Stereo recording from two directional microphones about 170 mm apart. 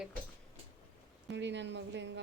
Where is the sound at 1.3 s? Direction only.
90° right.